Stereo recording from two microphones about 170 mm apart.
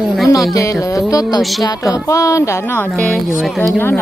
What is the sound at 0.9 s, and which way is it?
Speech, 20° left (ahead or behind).